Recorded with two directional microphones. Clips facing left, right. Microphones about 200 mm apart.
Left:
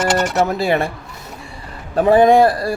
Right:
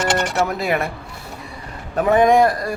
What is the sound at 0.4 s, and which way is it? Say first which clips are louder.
Speech: left 3 dB; 30° left (ahead or behind).